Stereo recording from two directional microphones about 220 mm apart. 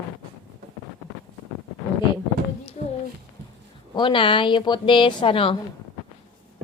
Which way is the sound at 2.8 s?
30° left (ahead or behind).